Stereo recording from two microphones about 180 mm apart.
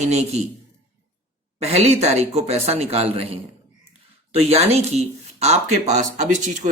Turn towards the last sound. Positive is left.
turn(degrees=-45)  # may be behind; listen again after turning